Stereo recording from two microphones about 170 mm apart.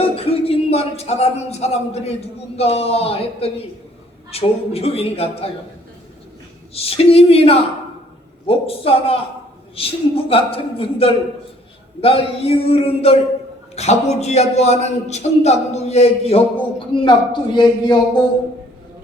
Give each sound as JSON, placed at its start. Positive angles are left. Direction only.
{"t": 0.0, "sound": "music", "side_deg": 35}
{"t": 2.6, "sound": "a man's voice", "side_deg": 35}
{"t": 6.7, "sound": "a man's voice", "side_deg": 35}